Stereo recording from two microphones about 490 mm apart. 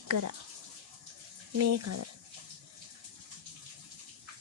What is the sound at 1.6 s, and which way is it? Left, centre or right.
Speech, right.